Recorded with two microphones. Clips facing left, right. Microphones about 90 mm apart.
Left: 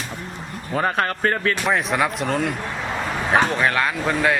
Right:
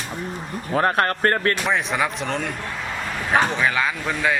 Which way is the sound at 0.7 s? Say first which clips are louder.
Right 2 dB; 5° right (ahead or behind).